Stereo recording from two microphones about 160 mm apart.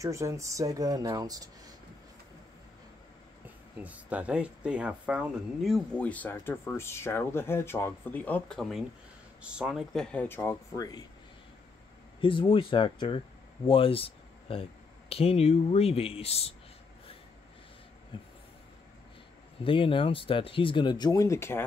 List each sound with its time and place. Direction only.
0.0 s speech: 20° right (ahead or behind)
3.7 s speech: 10° right (ahead or behind); by 11.1 s 25° left (ahead or behind)
12.2 s speech: 30° left (ahead or behind)
19.6 s speech: 35° left (ahead or behind); by 21.6 s 15° left (ahead or behind)